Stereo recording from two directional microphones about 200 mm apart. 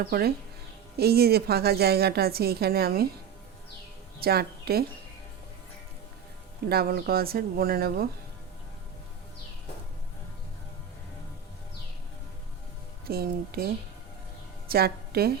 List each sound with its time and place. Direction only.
0.0 s a woman's voice: 50° right (ahead or behind)
4.2 s a woman's voice: 50° right (ahead or behind)
6.7 s a woman's voice: 50° right (ahead or behind)
13.1 s a woman's voice: 50° right (ahead or behind)
14.7 s a woman's voice: 50° right (ahead or behind)